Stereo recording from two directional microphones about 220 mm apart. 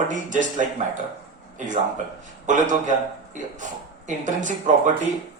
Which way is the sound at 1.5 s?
35° right (ahead or behind).